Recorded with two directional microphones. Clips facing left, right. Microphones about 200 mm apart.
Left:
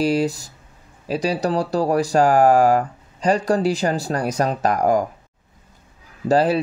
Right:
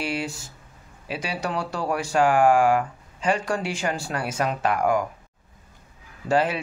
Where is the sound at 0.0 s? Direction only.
35° left (ahead or behind).